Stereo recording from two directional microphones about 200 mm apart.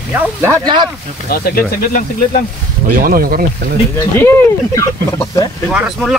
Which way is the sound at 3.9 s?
10° left (ahead or behind).